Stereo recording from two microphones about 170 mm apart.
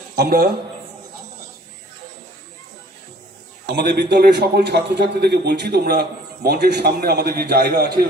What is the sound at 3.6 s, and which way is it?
A man's voice, 80° right.